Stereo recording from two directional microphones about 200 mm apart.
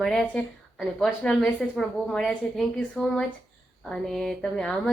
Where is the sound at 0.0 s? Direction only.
5° left (ahead or behind).